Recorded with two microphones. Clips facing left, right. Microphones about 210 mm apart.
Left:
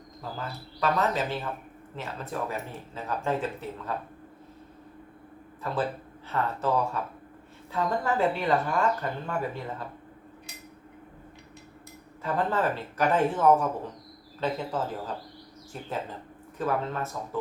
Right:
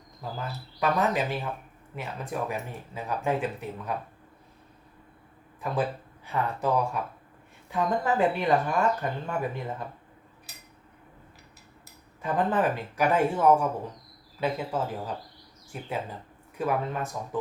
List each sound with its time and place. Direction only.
0.8 s speech: 15° right (ahead or behind)
5.6 s speech: 15° right (ahead or behind)
12.2 s speech: 15° right (ahead or behind)